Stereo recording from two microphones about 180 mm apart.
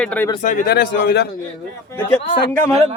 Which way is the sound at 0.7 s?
70° left (ahead or behind).